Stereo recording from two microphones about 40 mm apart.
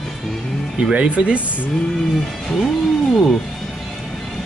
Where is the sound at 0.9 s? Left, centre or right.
Right.